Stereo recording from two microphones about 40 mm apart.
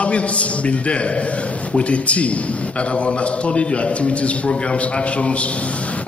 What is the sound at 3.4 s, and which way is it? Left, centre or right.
A man's voice, left.